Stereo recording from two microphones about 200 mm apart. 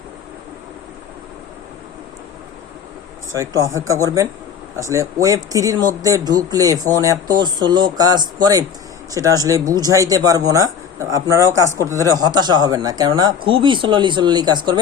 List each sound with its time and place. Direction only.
3.3 s a man's voice: 15° right (ahead or behind)